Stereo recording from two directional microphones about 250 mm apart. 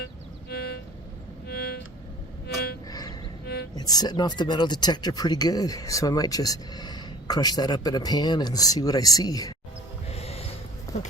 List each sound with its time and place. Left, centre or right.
0.5 s vehicle: left
1.5 s music: left
2.9 s music: centre
3.4 s music: left
3.8 s speech: centre
10.1 s a sound: left
10.9 s a sound: centre